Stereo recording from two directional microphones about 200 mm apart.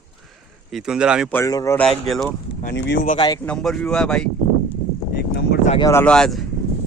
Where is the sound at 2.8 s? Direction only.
60° left (ahead or behind).